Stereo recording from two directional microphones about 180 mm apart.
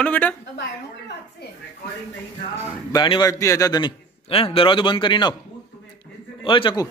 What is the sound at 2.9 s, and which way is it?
A man's voice, 25° left (ahead or behind).